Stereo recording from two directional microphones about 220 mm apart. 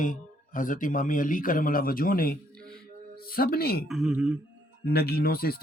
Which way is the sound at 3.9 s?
Centre (ahead or behind).